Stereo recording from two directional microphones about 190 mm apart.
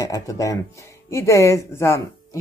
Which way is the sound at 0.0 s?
20° left (ahead or behind).